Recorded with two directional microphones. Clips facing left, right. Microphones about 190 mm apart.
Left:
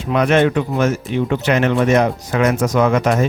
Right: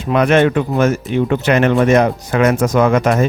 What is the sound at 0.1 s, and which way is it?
Speech, 60° right (ahead or behind).